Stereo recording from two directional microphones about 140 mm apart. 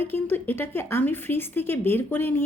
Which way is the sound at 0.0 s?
15° left (ahead or behind).